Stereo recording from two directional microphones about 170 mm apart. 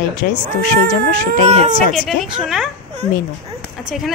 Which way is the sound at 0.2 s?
65° left (ahead or behind).